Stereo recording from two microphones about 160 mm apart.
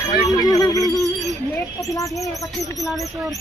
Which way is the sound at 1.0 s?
Centre (ahead or behind).